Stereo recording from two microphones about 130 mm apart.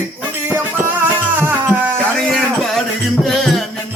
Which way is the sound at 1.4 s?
15° right (ahead or behind).